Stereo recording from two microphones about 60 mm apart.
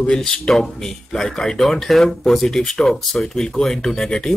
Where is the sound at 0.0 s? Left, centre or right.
Centre.